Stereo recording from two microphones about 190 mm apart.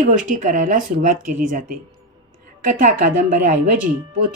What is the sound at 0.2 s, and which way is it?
Speech, 40° right (ahead or behind).